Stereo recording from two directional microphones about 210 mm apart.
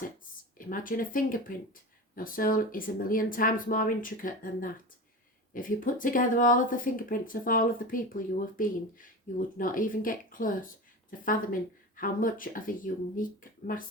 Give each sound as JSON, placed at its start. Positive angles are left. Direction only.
{"t": 0.6, "sound": "speech", "side_deg": 40}
{"t": 11.9, "sound": "speech", "side_deg": 40}